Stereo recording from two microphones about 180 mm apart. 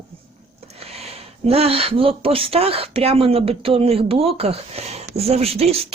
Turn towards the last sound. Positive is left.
turn(degrees=-35)  # may be behind; listen again after turning